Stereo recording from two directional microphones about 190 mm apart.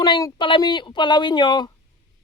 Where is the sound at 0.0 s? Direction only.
20° left (ahead or behind).